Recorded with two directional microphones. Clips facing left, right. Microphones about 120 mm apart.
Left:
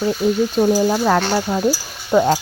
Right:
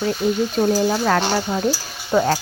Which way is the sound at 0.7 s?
10° left (ahead or behind).